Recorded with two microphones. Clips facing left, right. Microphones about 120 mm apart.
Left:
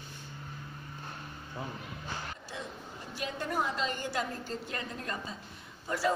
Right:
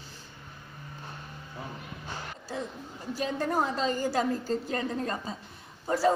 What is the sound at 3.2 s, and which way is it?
A woman's voice, 35° right (ahead or behind).